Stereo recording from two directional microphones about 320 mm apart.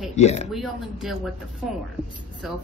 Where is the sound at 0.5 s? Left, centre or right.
Centre.